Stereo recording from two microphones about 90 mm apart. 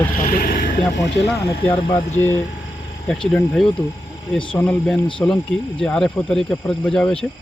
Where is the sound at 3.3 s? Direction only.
10° left (ahead or behind).